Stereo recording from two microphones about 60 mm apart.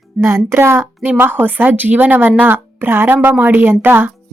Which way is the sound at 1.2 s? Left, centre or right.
Right.